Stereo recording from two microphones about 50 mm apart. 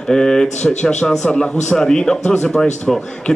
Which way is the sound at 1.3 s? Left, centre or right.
Centre.